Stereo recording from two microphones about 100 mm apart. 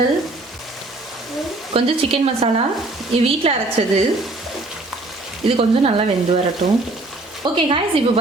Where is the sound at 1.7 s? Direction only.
70° right (ahead or behind).